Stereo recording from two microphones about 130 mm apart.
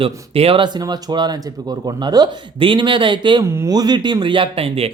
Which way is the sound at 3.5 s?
25° right (ahead or behind).